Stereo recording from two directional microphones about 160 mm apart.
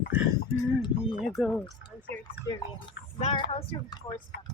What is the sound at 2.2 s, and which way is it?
Speech, 25° left (ahead or behind).